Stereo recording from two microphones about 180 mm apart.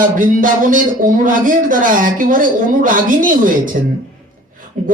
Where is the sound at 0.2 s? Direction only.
50° right (ahead or behind).